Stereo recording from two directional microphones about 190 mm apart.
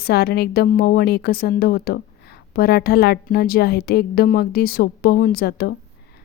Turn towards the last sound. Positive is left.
turn(degrees=55)  # may be behind; listen again after turning